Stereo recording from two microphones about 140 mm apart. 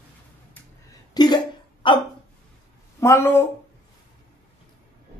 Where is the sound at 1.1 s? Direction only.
30° left (ahead or behind).